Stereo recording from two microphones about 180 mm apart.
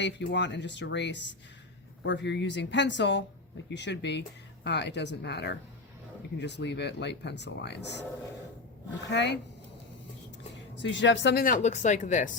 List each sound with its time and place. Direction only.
0.0 s speech: 80° left
9.0 s speech: 75° left (ahead or behind)
10.5 s speech: 85° left
11.4 s speech: 40° left (ahead or behind)